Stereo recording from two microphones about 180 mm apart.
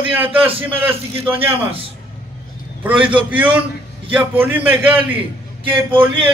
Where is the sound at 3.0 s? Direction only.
30° right (ahead or behind).